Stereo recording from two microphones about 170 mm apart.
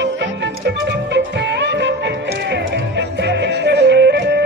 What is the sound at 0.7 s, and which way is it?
Music, 90° right.